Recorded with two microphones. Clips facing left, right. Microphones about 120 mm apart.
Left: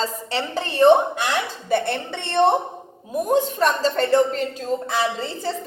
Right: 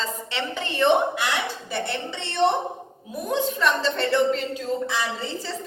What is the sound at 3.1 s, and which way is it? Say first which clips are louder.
A woman's voice: left 5 dB; 40° left (ahead or behind).